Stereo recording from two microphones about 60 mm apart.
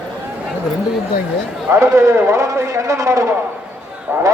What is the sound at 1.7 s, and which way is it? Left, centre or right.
Speech, right.